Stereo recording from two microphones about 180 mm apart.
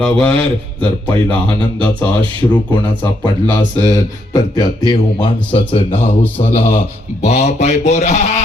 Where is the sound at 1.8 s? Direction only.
5° left (ahead or behind).